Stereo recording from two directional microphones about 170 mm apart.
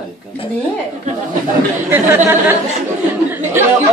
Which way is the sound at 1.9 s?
10° right (ahead or behind).